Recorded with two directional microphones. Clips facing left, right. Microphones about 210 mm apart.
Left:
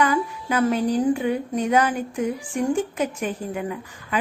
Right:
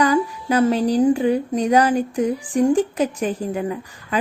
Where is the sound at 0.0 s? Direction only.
35° right (ahead or behind).